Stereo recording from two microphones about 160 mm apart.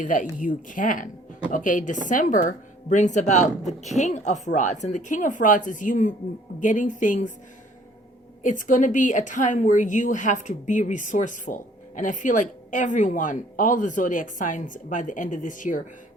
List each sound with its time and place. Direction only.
0.0 s a woman's voice: 55° left (ahead or behind)
8.4 s a woman's voice: 50° left (ahead or behind)